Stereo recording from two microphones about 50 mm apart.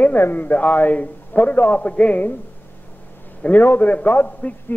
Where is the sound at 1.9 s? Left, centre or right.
Left.